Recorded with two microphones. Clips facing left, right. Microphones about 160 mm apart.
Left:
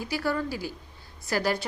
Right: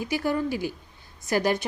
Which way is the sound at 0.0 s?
20° right (ahead or behind).